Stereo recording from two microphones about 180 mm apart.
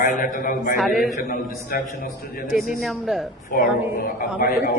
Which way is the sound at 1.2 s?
55° left (ahead or behind).